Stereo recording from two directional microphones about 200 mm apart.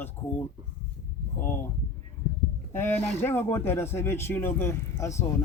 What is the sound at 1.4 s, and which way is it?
Speech, 10° left (ahead or behind).